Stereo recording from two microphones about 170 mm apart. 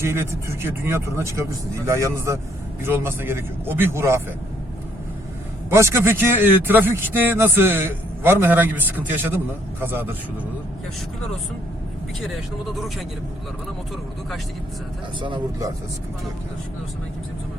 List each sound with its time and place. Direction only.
0.0 s a man's voice: 15° right (ahead or behind)
5.7 s a man's voice: 15° right (ahead or behind)
12.2 s speech: centre (ahead or behind)
15.2 s speech: 25° right (ahead or behind)